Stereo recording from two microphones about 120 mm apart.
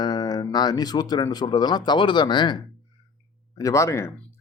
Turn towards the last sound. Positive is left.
turn(degrees=25)  # may be behind; listen again after turning